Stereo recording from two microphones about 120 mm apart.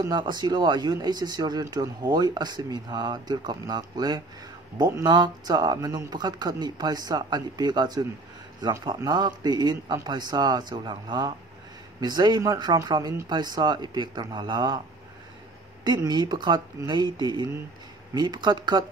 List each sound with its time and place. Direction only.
0.0 s speech: 35° right (ahead or behind)
15.8 s speech: 35° right (ahead or behind)